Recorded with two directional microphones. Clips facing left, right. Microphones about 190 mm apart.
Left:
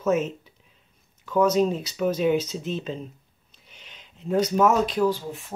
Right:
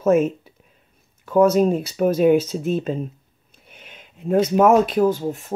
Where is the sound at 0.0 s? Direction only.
50° right (ahead or behind).